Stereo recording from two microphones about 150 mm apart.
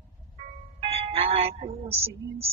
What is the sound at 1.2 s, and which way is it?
A woman's voice, 40° right (ahead or behind).